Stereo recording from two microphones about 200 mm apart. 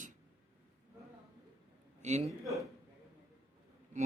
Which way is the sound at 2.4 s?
Centre (ahead or behind).